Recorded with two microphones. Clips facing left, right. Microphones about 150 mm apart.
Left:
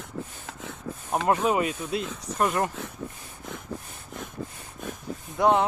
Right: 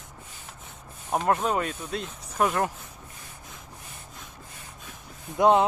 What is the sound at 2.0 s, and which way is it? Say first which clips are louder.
Speech: left 6 dB; 90° left.